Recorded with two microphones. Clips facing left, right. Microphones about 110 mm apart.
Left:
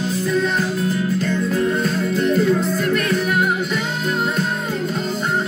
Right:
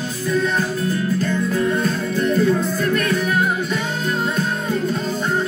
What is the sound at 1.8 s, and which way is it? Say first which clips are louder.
Music: left 1 dB; 25° left (ahead or behind).